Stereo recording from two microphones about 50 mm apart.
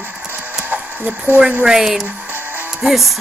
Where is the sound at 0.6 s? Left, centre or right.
Right.